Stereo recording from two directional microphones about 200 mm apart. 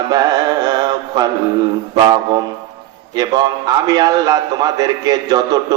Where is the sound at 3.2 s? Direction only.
20° right (ahead or behind).